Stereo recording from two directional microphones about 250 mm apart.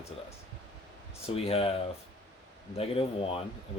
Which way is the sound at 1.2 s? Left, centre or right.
Left.